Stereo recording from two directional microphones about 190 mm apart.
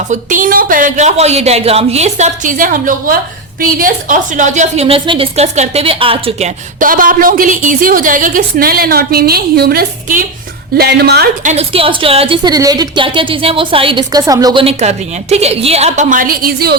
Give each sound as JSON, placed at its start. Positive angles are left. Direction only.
{"t": 0.1, "sound": "speech", "side_deg": -45}
{"t": 6.7, "sound": "a woman's voice", "side_deg": -45}
{"t": 11.4, "sound": "a woman's voice", "side_deg": -30}
{"t": 14.6, "sound": "speech", "side_deg": -35}